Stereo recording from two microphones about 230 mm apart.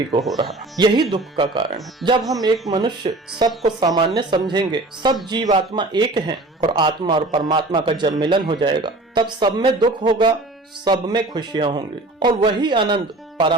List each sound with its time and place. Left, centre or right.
0.1 s speech: centre